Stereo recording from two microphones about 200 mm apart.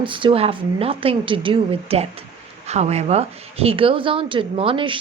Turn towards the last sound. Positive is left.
turn(degrees=-25)  # may be behind; listen again after turning